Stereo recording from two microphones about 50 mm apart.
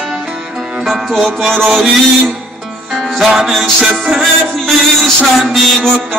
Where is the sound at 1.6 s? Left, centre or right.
Centre.